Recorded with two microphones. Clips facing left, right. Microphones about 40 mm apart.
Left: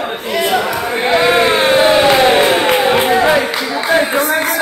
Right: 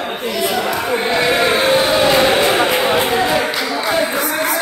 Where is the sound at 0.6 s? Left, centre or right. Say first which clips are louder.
Left 1 dB; centre.